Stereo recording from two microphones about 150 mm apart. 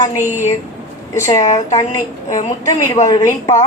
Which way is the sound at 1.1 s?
20° left (ahead or behind).